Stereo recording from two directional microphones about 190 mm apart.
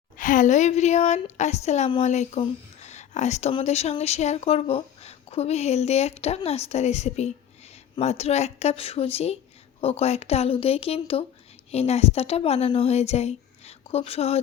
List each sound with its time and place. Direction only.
0.2 s speech: 45° left (ahead or behind)